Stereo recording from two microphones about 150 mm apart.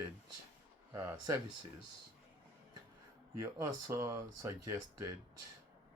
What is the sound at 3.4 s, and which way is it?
Speech, 20° right (ahead or behind).